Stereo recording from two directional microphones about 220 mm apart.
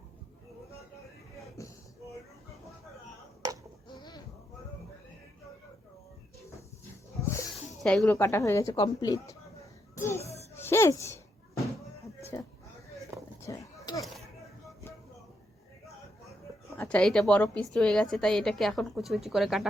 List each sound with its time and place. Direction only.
1.6 s a sound: 15° left (ahead or behind)
7.2 s music: 15° left (ahead or behind)
7.8 s speech: 5° left (ahead or behind)
9.9 s child singing: 10° left (ahead or behind)
10.2 s music: 30° left (ahead or behind)
10.5 s music: 10° left (ahead or behind)
12.3 s a sound: 15° left (ahead or behind)
16.7 s a woman's voice: 5° left (ahead or behind)